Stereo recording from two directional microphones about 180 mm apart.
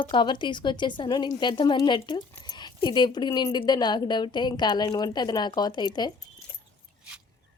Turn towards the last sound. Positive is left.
turn(degrees=25)  # may be behind; listen again after turning